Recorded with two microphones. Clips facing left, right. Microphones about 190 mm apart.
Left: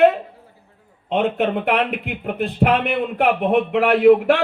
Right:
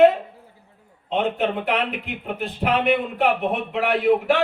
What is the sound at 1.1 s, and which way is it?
Speech, 60° left (ahead or behind).